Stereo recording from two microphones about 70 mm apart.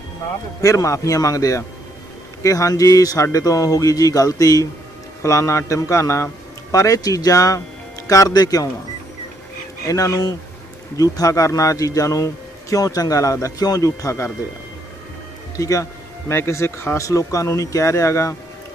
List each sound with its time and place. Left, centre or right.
0.6 s speech: left
5.2 s speech: left
6.7 s speech: left
8.3 s speech: left
9.8 s speech: left
15.5 s speech: left
16.3 s speech: left